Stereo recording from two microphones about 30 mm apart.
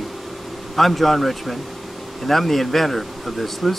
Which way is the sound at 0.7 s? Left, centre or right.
Centre.